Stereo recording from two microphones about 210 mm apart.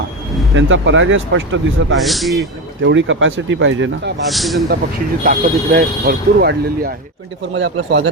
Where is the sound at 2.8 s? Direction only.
65° right (ahead or behind).